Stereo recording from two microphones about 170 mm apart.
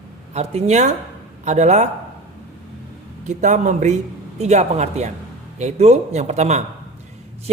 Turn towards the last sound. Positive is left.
turn(degrees=-40)  # may be behind; listen again after turning